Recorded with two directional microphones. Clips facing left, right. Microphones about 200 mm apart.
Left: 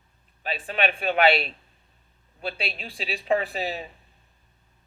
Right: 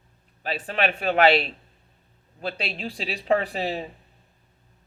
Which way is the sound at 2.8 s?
40° right (ahead or behind).